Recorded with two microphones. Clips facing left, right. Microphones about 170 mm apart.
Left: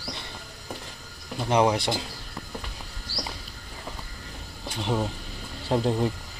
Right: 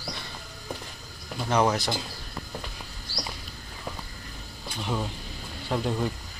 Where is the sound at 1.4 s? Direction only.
25° left (ahead or behind).